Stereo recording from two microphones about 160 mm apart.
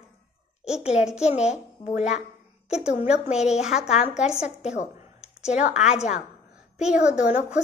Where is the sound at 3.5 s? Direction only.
5° right (ahead or behind).